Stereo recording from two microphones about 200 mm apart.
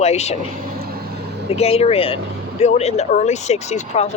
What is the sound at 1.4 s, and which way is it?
Speech, 30° left (ahead or behind).